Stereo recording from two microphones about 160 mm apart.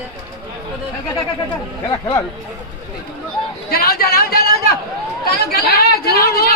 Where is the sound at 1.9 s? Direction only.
25° left (ahead or behind).